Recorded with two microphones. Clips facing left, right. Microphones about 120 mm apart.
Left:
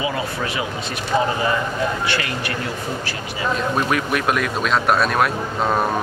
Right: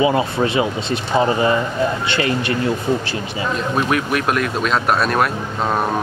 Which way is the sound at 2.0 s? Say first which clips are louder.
Right 5 dB; 25° right (ahead or behind).